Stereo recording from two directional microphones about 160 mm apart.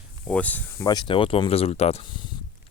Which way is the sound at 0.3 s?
10° left (ahead or behind).